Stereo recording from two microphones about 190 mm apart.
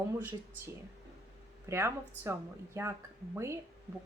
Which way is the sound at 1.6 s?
15° right (ahead or behind).